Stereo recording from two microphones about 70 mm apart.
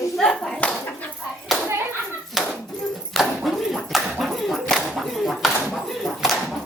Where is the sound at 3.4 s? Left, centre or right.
Centre.